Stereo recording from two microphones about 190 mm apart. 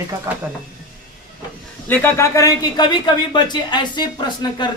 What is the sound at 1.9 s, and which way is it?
Speech, 10° left (ahead or behind).